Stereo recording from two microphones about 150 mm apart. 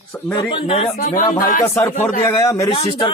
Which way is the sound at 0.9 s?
60° left (ahead or behind).